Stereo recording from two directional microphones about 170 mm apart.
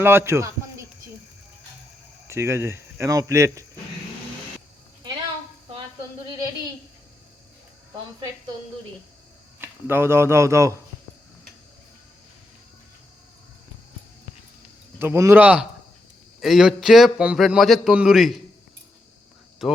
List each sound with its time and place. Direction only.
0.0 s a man's voice: 15° right (ahead or behind)
2.2 s speech: 15° right (ahead or behind)
9.6 s speech: 15° right (ahead or behind)
14.9 s a man's voice: 15° right (ahead or behind)
19.6 s a man's voice: centre (ahead or behind)